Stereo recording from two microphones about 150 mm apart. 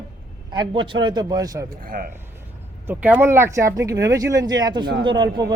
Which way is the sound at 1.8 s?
70° right (ahead or behind).